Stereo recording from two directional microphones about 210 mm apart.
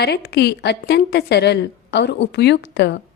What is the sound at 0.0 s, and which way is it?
A woman's voice, 50° left (ahead or behind).